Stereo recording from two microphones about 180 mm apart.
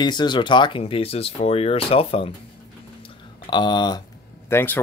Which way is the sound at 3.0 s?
25° left (ahead or behind).